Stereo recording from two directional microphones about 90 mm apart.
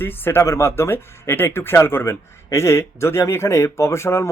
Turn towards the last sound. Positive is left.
turn(degrees=30)  # may be behind; listen again after turning